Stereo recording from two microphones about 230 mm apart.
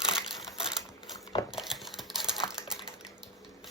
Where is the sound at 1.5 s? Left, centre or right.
Centre.